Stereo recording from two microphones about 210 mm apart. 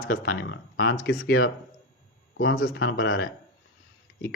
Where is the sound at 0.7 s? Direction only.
65° left (ahead or behind).